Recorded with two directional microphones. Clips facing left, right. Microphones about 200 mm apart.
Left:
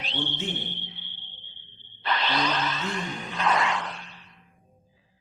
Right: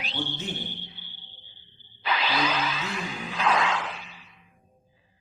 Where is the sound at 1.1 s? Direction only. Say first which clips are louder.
Left 1 dB; 40° right (ahead or behind).